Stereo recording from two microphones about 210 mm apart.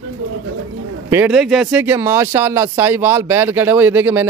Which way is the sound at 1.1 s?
5° right (ahead or behind).